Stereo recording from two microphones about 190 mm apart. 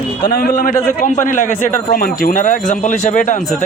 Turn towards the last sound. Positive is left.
turn(degrees=40)  # may be behind; listen again after turning